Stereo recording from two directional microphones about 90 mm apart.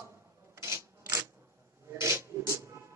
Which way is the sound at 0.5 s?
35° right (ahead or behind).